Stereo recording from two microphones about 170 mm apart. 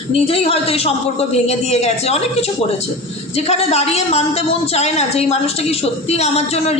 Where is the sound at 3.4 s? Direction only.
35° left (ahead or behind).